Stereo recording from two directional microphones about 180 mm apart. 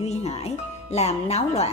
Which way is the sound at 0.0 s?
35° left (ahead or behind).